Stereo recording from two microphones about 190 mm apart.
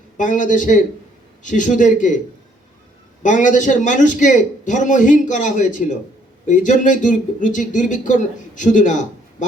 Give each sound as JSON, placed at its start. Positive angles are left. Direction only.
{"t": 0.2, "sound": "speech", "side_deg": 40}
{"t": 3.2, "sound": "speech", "side_deg": 40}